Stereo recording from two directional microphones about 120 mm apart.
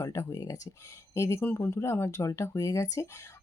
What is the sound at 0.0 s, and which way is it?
Speech, 25° left (ahead or behind).